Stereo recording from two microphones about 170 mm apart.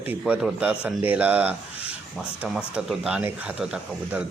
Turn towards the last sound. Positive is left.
turn(degrees=-5)  # may be behind; listen again after turning